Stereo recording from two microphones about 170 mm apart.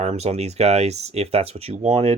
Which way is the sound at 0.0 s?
40° right (ahead or behind).